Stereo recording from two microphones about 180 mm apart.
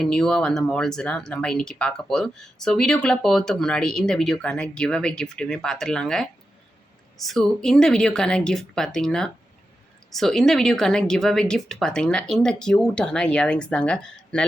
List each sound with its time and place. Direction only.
0.0 s speech: 5° left (ahead or behind)